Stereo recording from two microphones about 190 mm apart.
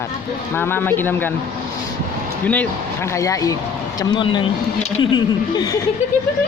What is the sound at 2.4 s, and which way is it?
Speech, 5° left (ahead or behind).